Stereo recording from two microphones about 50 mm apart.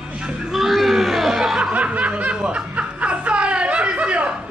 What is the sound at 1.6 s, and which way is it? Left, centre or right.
Snicker, right.